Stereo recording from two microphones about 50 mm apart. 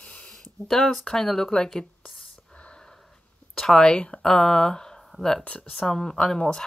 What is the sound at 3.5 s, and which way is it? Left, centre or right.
Speech, centre.